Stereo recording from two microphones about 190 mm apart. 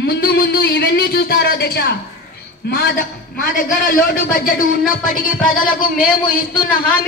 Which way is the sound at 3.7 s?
45° left (ahead or behind).